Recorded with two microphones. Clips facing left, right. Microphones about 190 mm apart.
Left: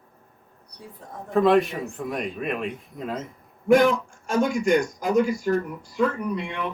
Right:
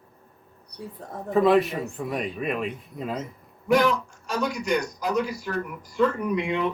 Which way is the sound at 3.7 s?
50° left (ahead or behind).